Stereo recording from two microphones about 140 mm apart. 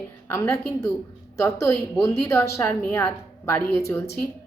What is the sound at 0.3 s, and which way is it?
A woman's voice, 20° left (ahead or behind).